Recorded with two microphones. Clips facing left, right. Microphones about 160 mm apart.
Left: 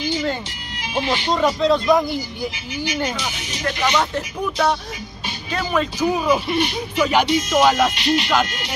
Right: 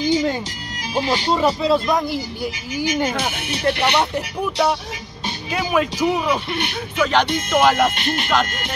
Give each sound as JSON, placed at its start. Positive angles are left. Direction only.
{"t": 0.1, "sound": "music", "side_deg": -15}
{"t": 0.9, "sound": "speech", "side_deg": -35}
{"t": 1.3, "sound": "speech", "side_deg": -5}
{"t": 2.7, "sound": "speech", "side_deg": -45}
{"t": 3.1, "sound": "speech", "side_deg": -55}
{"t": 5.5, "sound": "speech", "side_deg": -10}
{"t": 6.2, "sound": "speech", "side_deg": 5}
{"t": 7.2, "sound": "speech", "side_deg": -55}
{"t": 7.6, "sound": "speech", "side_deg": 0}
{"t": 7.9, "sound": "speech", "side_deg": -50}